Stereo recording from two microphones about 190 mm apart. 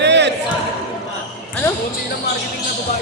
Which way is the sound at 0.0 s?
65° right (ahead or behind).